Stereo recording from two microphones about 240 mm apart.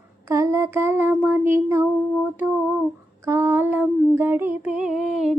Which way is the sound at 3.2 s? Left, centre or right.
Centre.